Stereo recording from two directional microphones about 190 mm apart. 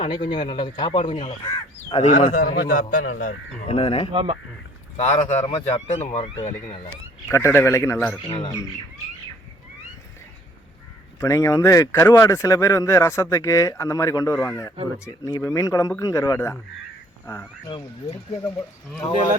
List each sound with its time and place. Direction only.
0.0 s a man's voice: 25° left (ahead or behind); by 3.0 s 50° left (ahead or behind)
3.2 s speech: 35° left (ahead or behind)
4.1 s speech: 30° right (ahead or behind)
4.9 s speech: 35° left (ahead or behind)
7.3 s speech: 15° left (ahead or behind)
11.2 s speech: 15° left (ahead or behind)